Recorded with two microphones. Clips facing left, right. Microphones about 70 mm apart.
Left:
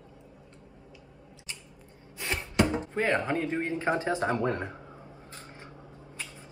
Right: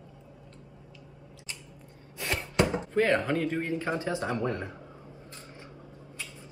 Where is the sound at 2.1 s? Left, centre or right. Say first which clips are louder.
Right 1 dB; centre.